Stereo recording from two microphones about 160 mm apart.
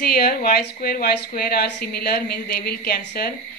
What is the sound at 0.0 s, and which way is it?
A woman's voice, 70° left (ahead or behind).